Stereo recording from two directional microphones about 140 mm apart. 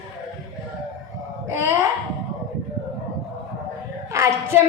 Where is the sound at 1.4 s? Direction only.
20° right (ahead or behind).